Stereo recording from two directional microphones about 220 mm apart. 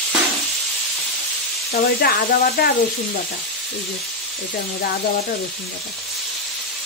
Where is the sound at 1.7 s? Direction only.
45° left (ahead or behind).